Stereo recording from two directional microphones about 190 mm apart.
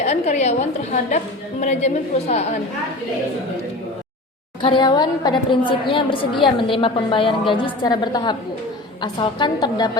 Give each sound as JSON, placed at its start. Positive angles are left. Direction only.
{"t": 0.0, "sound": "a woman's voice", "side_deg": 35}
{"t": 4.6, "sound": "a woman's voice", "side_deg": 25}